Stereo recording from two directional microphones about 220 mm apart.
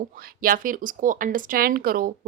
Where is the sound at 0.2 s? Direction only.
40° right (ahead or behind).